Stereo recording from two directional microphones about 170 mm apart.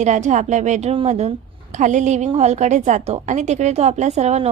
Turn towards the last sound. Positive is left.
turn(degrees=-40)  # may be behind; listen again after turning